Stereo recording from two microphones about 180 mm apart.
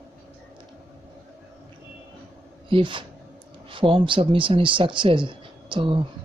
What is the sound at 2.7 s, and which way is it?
Speech, 25° right (ahead or behind).